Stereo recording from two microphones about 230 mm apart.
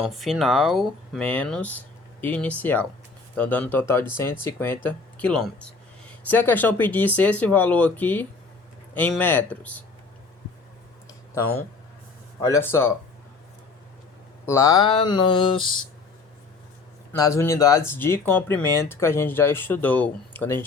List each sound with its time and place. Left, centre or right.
0.0 s speech: centre
12.5 s speech: centre
14.4 s mantra: centre
17.1 s speech: centre